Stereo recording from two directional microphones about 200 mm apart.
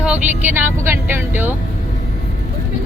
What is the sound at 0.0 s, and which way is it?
Speech, 10° right (ahead or behind).